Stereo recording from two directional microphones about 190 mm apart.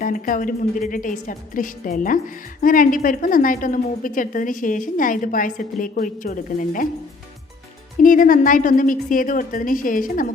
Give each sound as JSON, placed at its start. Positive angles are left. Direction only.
{"t": 0.0, "sound": "a woman's voice", "side_deg": 45}
{"t": 7.9, "sound": "a woman's voice", "side_deg": 45}